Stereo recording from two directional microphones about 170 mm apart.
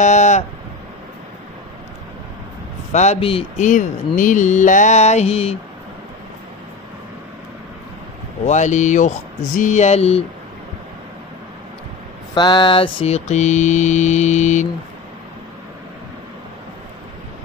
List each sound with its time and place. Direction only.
0.0 s mantra: 45° left (ahead or behind)
2.9 s a man's voice: 40° left (ahead or behind)
3.6 s mantra: 50° left (ahead or behind)
8.5 s mantra: 45° left (ahead or behind)
12.4 s mantra: 25° left (ahead or behind); by 14.7 s 45° left (ahead or behind)